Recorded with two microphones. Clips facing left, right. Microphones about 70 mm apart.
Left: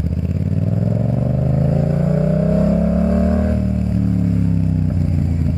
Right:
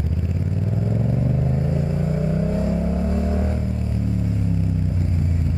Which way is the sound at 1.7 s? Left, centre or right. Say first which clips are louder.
Left 6 dB; left.